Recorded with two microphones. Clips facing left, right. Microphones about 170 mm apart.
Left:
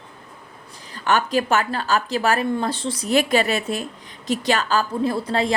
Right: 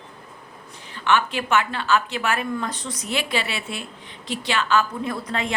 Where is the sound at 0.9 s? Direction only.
40° left (ahead or behind).